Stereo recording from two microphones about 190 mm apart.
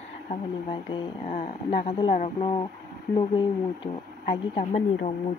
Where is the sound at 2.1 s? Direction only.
35° left (ahead or behind).